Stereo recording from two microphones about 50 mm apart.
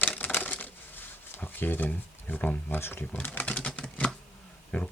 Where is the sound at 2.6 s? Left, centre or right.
Left.